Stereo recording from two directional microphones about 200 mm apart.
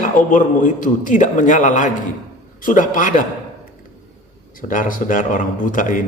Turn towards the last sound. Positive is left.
turn(degrees=40)  # may be behind; listen again after turning